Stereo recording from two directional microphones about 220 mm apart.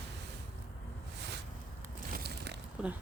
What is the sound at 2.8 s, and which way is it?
Speech, 5° right (ahead or behind).